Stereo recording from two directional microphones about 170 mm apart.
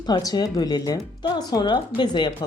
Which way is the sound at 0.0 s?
25° left (ahead or behind).